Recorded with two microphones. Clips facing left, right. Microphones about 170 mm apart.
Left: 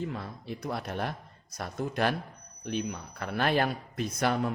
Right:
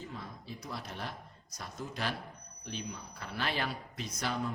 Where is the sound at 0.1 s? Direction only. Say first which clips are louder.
Left 7 dB; 65° left (ahead or behind).